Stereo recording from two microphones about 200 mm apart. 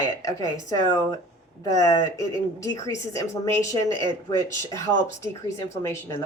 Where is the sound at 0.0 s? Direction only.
15° left (ahead or behind).